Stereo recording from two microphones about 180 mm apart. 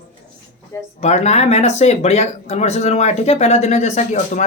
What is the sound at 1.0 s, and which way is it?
Speech, 35° left (ahead or behind).